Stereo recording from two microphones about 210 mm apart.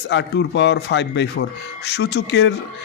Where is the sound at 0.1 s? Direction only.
55° left (ahead or behind).